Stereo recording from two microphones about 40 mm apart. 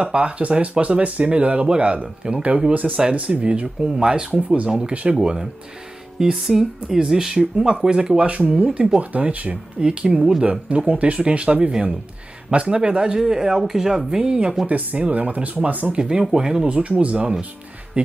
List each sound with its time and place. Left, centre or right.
0.0 s speech: right
9.0 s speech: right
9.8 s speech: right
14.7 s speech: right
16.0 s speech: right
16.6 s speech: right
17.9 s bee: right